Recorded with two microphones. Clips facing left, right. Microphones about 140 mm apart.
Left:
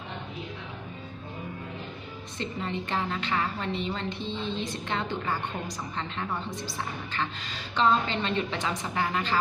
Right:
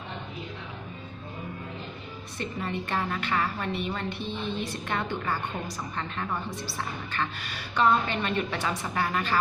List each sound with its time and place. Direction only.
2.4 s a woman's voice: 20° left (ahead or behind)
4.2 s a woman's voice: 15° right (ahead or behind)
4.6 s a woman's voice: 20° left (ahead or behind)